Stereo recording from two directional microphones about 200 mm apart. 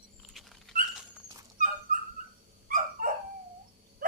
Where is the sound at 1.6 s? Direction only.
40° right (ahead or behind).